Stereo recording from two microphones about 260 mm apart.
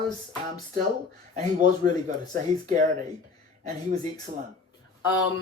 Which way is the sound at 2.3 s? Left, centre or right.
Right.